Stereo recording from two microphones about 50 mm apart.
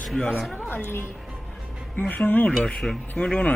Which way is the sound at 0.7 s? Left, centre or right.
Left.